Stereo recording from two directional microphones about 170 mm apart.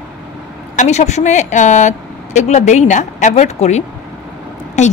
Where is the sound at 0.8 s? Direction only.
40° left (ahead or behind).